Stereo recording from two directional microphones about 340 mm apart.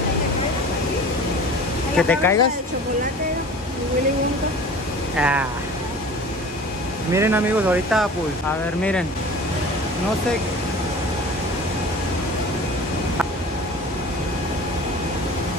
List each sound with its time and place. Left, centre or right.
2.0 s speech: centre
5.1 s speech: centre
7.1 s speech: centre